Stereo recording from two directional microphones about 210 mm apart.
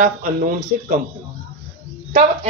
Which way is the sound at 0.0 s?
40° right (ahead or behind).